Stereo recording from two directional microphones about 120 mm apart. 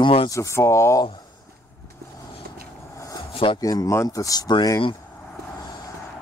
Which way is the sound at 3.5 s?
30° left (ahead or behind).